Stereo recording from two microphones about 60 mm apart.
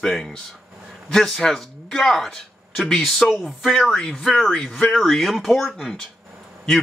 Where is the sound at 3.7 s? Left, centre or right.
Centre.